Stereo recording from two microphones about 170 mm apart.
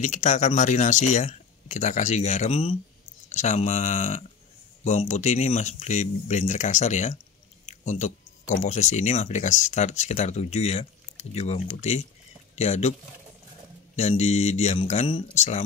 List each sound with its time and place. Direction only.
0.0 s speech: 45° left (ahead or behind)
13.9 s speech: 40° left (ahead or behind)